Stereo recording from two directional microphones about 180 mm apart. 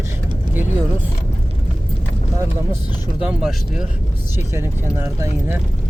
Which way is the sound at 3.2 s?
5° right (ahead or behind).